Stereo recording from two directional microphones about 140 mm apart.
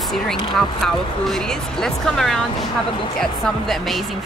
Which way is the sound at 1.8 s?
5° left (ahead or behind).